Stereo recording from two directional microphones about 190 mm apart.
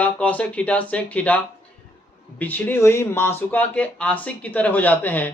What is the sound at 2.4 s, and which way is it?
Speech, 10° left (ahead or behind).